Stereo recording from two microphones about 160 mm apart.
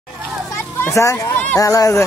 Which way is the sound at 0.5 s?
15° left (ahead or behind).